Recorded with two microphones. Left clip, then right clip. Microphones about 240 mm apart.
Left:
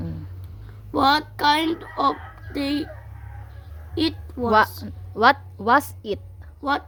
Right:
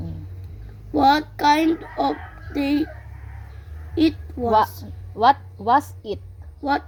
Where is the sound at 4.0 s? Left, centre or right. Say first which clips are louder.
Right 4 dB; left.